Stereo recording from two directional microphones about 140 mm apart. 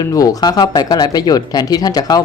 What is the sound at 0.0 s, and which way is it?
Speech, 25° left (ahead or behind).